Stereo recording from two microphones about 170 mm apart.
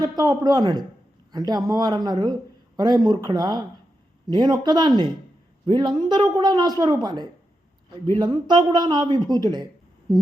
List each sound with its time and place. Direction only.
0.0 s a man's voice: 25° right (ahead or behind)